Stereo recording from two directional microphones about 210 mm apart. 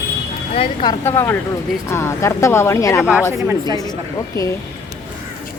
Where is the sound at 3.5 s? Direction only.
15° right (ahead or behind).